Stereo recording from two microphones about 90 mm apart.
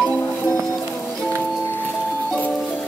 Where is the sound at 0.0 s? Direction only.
10° left (ahead or behind).